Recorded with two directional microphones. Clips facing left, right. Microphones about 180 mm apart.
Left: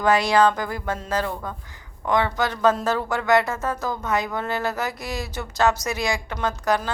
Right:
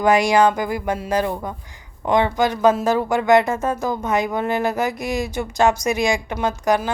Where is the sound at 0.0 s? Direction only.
15° right (ahead or behind).